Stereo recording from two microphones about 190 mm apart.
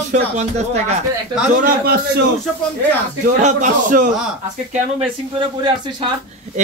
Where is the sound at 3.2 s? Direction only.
40° right (ahead or behind).